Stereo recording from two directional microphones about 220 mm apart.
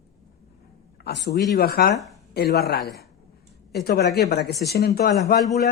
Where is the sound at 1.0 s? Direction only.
50° left (ahead or behind).